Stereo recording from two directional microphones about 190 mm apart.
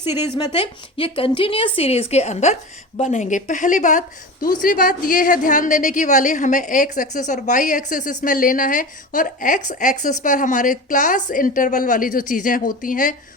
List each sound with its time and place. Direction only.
0.0 s speech: 10° right (ahead or behind)
0.3 s a woman's voice: 25° left (ahead or behind); by 13.1 s 45° left (ahead or behind)